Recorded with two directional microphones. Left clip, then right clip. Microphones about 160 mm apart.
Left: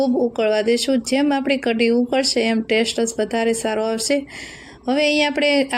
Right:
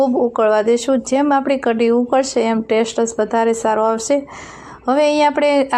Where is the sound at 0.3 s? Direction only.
20° left (ahead or behind).